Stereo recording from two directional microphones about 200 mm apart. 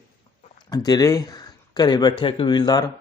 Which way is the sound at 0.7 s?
20° left (ahead or behind).